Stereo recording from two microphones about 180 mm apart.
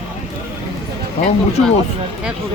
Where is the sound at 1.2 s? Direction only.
40° left (ahead or behind).